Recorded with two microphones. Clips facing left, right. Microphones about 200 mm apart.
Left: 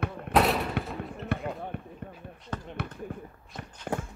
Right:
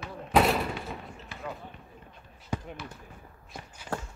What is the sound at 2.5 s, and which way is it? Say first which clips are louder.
Basketball bounce: right 3 dB; 10° right (ahead or behind).